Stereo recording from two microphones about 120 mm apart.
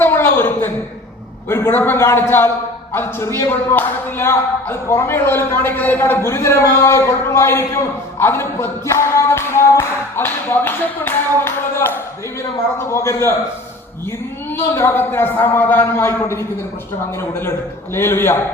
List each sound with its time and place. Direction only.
0.0 s a sound: 20° left (ahead or behind)
1.5 s speech: 20° left (ahead or behind)
14.5 s speech: 20° left (ahead or behind)